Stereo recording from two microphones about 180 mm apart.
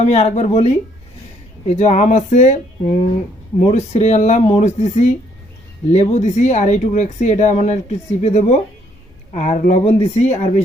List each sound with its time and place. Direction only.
0.0 s speech: 35° left (ahead or behind)